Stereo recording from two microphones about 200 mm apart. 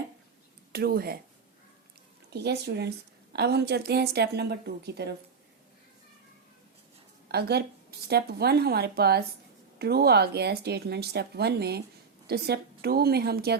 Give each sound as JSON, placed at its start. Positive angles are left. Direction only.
{"t": 0.7, "sound": "speech", "side_deg": -50}
{"t": 2.3, "sound": "a woman's voice", "side_deg": -55}
{"t": 7.3, "sound": "speech", "side_deg": -55}